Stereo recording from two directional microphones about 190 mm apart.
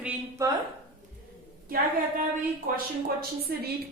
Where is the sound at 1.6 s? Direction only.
50° right (ahead or behind).